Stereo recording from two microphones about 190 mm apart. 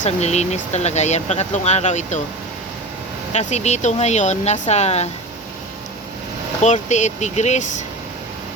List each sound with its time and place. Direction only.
0.0 s speech: 35° left (ahead or behind)
3.3 s speech: 35° left (ahead or behind)
6.6 s speech: 40° left (ahead or behind)